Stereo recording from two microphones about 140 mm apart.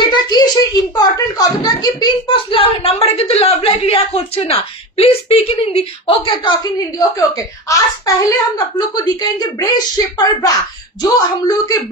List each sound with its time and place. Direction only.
0.0 s a woman's voice: 30° left (ahead or behind)